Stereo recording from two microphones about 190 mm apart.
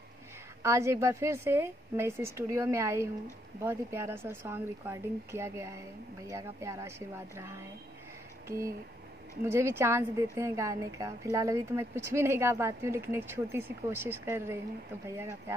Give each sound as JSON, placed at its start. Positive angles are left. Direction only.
{"t": 0.6, "sound": "a woman's voice", "side_deg": -15}
{"t": 8.5, "sound": "a woman's voice", "side_deg": -15}